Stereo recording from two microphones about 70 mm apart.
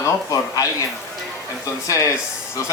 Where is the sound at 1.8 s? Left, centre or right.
Left.